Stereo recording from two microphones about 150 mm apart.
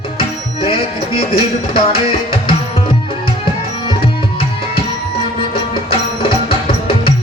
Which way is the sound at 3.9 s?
35° left (ahead or behind).